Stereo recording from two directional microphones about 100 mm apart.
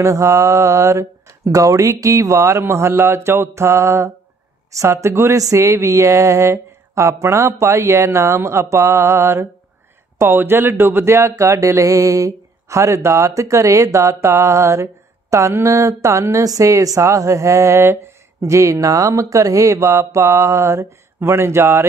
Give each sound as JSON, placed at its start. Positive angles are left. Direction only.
{"t": 0.0, "sound": "speech", "side_deg": -30}